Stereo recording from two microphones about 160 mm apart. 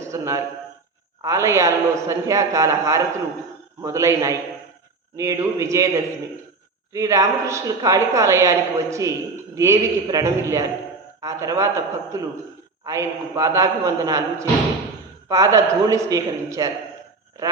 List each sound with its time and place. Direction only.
0.0 s a sound: 20° right (ahead or behind)
1.2 s a woman's voice: 20° right (ahead or behind)
6.9 s a woman's voice: 20° right (ahead or behind)